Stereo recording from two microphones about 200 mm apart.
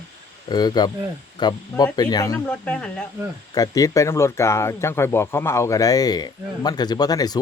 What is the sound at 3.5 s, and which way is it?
Speech, 20° left (ahead or behind).